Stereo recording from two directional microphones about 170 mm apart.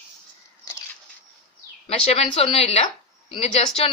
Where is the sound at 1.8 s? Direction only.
35° left (ahead or behind).